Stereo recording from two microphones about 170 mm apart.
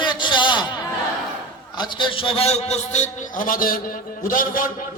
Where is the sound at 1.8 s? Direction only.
30° left (ahead or behind); by 4.7 s 55° left (ahead or behind).